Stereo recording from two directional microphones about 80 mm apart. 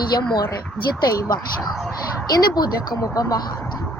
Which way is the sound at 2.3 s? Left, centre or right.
Left.